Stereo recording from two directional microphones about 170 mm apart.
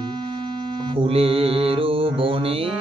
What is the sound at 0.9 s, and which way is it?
Mantra, 35° right (ahead or behind).